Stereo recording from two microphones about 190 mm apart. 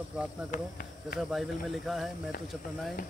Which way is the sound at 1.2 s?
Centre (ahead or behind).